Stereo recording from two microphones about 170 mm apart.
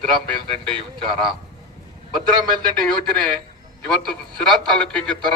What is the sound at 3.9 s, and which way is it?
A man's voice, 5° left (ahead or behind).